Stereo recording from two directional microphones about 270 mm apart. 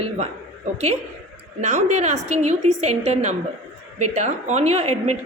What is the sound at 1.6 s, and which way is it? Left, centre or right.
A woman's voice, right.